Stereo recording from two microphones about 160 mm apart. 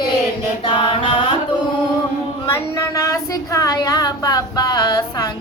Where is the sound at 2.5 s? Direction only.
20° left (ahead or behind).